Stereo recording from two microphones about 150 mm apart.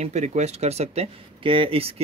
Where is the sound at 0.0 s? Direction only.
50° right (ahead or behind).